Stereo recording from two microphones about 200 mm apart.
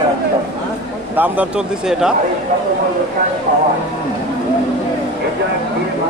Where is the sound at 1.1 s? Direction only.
10° right (ahead or behind).